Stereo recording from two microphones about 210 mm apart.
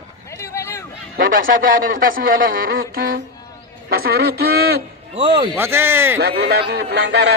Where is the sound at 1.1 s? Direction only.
40° right (ahead or behind).